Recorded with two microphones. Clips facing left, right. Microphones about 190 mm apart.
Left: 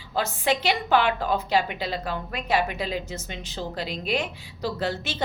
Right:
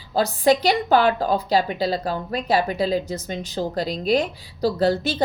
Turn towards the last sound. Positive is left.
turn(degrees=-35)  # may be behind; listen again after turning